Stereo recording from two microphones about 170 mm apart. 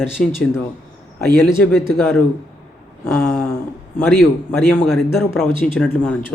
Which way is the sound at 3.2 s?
10° left (ahead or behind).